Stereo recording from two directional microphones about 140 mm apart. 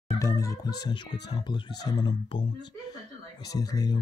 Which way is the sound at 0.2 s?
25° left (ahead or behind).